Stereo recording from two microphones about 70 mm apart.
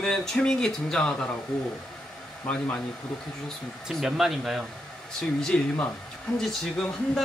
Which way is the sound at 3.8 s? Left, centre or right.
Centre.